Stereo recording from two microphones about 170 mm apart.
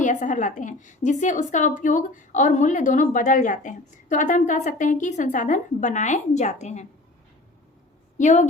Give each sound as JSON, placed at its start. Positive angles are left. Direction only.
{"t": 0.0, "sound": "a woman's voice", "side_deg": 45}
{"t": 8.2, "sound": "a woman's voice", "side_deg": 45}